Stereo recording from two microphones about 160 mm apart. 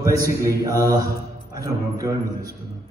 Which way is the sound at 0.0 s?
20° right (ahead or behind).